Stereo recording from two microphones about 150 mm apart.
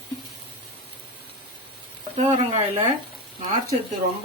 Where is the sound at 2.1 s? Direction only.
50° right (ahead or behind).